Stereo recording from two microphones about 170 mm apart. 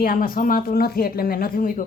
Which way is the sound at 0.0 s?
60° left (ahead or behind).